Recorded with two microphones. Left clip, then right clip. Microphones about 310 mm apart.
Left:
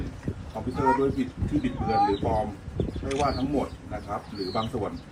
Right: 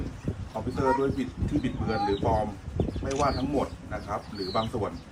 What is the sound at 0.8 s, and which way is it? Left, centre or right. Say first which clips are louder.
Speech: left 2 dB; centre.